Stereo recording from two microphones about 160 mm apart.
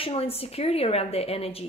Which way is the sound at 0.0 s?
35° left (ahead or behind).